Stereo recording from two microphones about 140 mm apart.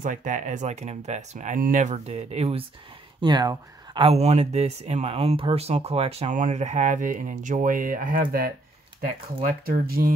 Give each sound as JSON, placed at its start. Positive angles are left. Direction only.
{"t": 0.0, "sound": "speech", "side_deg": -65}
{"t": 3.2, "sound": "speech", "side_deg": -30}
{"t": 4.1, "sound": "speech", "side_deg": -50}
{"t": 6.3, "sound": "speech", "side_deg": -60}
{"t": 9.7, "sound": "speech", "side_deg": -90}